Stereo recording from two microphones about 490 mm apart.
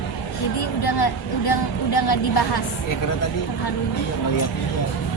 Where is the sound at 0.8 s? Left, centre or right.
Left.